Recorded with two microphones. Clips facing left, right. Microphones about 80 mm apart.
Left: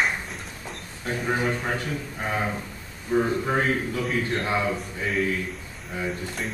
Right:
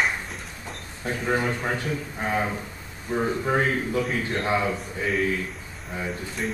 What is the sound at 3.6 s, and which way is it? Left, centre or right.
A man's voice, right.